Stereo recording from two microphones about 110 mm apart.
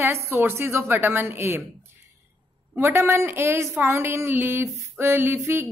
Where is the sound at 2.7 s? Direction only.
20° right (ahead or behind).